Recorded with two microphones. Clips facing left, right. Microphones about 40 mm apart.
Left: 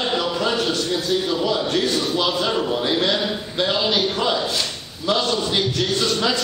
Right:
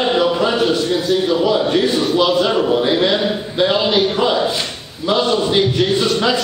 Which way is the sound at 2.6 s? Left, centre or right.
Centre.